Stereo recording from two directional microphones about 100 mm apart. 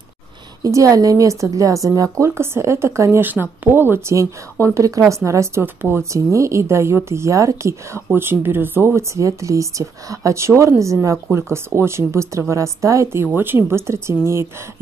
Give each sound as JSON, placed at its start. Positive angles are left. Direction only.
{"t": 0.7, "sound": "a woman's voice", "side_deg": -35}